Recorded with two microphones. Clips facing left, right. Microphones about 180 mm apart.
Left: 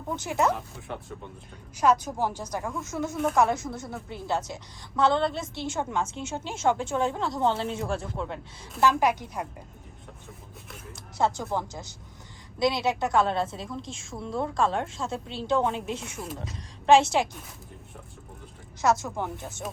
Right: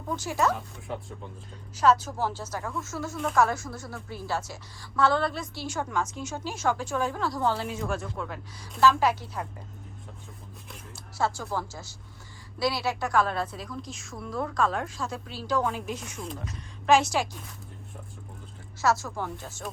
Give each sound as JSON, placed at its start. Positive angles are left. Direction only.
{"t": 0.1, "sound": "a woman's voice", "side_deg": 20}
{"t": 1.7, "sound": "a woman's voice", "side_deg": 10}
{"t": 3.1, "sound": "speech", "side_deg": 5}
{"t": 3.3, "sound": "a woman's voice", "side_deg": 20}
{"t": 8.8, "sound": "a woman's voice", "side_deg": 15}
{"t": 11.2, "sound": "a woman's voice", "side_deg": 20}
{"t": 16.1, "sound": "speech", "side_deg": 5}
{"t": 16.8, "sound": "a woman's voice", "side_deg": 25}
{"t": 18.8, "sound": "a woman's voice", "side_deg": 20}